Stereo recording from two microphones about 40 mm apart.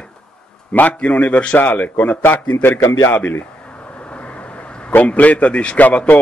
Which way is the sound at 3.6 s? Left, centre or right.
Left.